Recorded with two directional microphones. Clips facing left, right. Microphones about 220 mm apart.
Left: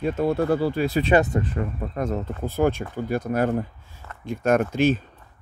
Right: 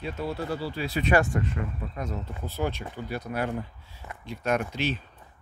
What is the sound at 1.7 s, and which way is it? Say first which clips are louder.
Speech: left 8 dB; 50° left (ahead or behind).